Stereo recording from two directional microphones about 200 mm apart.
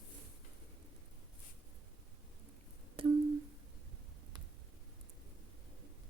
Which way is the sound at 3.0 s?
25° right (ahead or behind).